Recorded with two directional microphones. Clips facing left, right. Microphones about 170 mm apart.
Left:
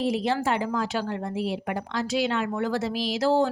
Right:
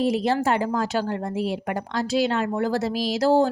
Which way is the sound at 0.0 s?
45° right (ahead or behind).